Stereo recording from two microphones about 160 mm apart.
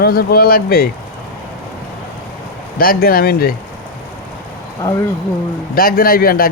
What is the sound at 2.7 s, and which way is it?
Speech, 65° left (ahead or behind).